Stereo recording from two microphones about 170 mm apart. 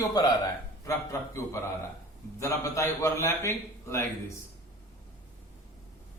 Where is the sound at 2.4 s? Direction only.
15° left (ahead or behind).